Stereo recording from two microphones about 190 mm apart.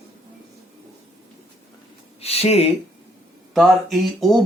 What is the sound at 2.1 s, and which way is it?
Speech, 30° left (ahead or behind).